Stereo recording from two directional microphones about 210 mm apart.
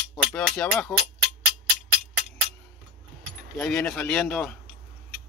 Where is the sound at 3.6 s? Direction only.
Centre (ahead or behind).